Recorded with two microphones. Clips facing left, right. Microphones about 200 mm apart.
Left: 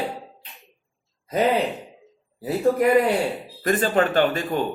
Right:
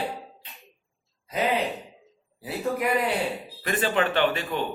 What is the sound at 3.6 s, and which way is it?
Mantra, 40° left (ahead or behind).